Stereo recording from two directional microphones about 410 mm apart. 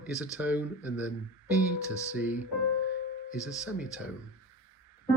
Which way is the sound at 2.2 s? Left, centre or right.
Centre.